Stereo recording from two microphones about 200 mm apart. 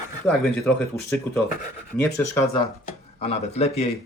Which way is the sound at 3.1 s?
30° left (ahead or behind).